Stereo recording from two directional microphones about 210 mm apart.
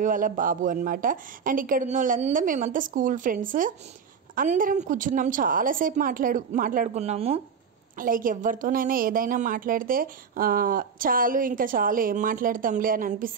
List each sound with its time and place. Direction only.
0.0 s a woman's voice: 40° right (ahead or behind)
8.0 s a woman's voice: 40° right (ahead or behind)